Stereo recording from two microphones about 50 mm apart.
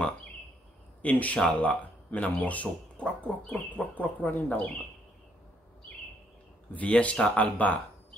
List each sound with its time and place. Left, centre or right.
1.0 s speech: left
6.7 s speech: left